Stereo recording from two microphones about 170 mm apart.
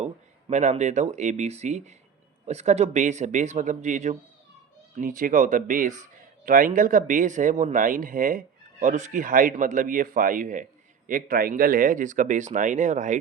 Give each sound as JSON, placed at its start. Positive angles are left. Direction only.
{"t": 0.0, "sound": "speech", "side_deg": -40}